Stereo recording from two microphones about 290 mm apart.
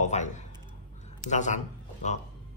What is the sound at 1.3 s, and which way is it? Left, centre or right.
Speech, left.